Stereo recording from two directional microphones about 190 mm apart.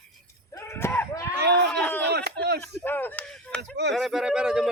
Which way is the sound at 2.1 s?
60° right (ahead or behind).